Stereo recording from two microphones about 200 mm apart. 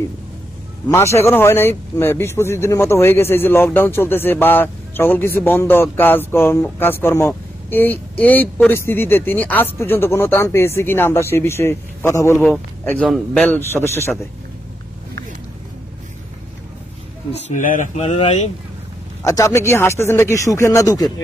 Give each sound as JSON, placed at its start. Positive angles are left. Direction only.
{"t": 0.8, "sound": "speech", "side_deg": 15}
{"t": 17.3, "sound": "speech", "side_deg": 35}
{"t": 18.0, "sound": "speech", "side_deg": 30}
{"t": 19.2, "sound": "speech", "side_deg": 15}